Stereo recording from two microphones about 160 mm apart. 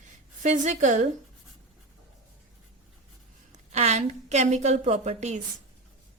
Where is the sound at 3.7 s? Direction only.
45° right (ahead or behind).